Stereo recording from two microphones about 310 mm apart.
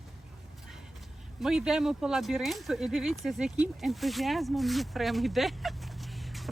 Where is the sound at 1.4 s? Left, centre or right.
Centre.